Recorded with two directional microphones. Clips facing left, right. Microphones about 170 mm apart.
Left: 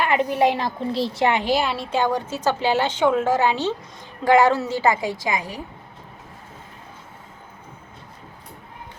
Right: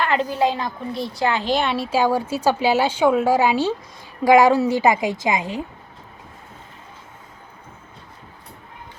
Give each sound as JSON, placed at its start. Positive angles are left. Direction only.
{"t": 0.0, "sound": "a woman's voice", "side_deg": 15}
{"t": 1.5, "sound": "a woman's voice", "side_deg": 0}